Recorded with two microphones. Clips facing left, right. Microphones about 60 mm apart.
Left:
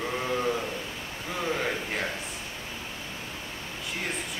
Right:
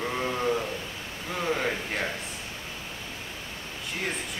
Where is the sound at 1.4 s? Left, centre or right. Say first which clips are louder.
Right 1 dB; centre.